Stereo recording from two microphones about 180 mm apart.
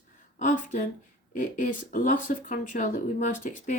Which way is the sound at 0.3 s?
45° left (ahead or behind).